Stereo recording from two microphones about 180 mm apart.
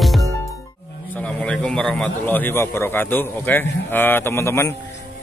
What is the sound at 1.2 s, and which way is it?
A man's voice, 5° left (ahead or behind).